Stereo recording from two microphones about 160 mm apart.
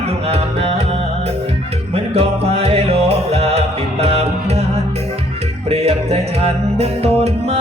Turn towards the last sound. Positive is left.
turn(degrees=-40)  # may be behind; listen again after turning